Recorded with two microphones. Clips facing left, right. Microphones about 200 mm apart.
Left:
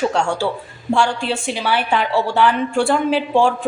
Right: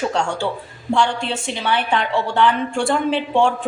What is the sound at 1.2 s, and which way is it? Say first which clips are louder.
Speech: left 3 dB; 25° right (ahead or behind).